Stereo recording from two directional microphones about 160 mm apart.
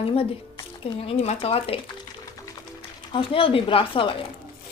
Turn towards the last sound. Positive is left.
turn(degrees=30)  # may be behind; listen again after turning